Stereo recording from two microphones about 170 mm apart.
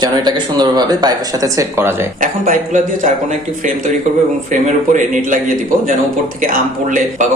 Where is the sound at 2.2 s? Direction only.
50° right (ahead or behind).